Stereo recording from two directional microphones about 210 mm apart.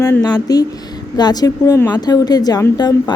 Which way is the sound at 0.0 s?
15° left (ahead or behind).